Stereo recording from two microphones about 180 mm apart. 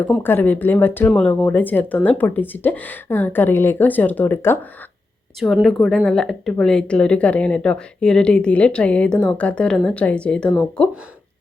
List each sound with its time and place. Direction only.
0.0 s speech: 10° left (ahead or behind)
5.4 s speech: centre (ahead or behind)